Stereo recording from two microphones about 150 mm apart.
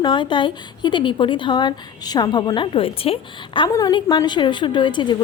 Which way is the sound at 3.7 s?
25° left (ahead or behind).